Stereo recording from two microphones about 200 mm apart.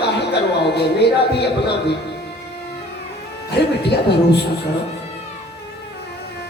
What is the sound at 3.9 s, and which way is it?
Speech, 55° left (ahead or behind).